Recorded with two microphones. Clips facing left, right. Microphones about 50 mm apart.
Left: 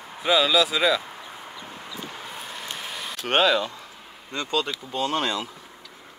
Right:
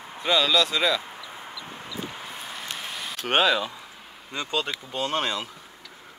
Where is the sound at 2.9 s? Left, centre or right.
Centre.